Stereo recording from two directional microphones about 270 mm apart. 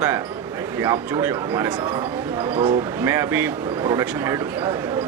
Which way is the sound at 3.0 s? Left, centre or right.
Centre.